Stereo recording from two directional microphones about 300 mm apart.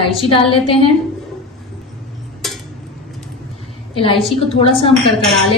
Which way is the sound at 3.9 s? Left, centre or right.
Centre.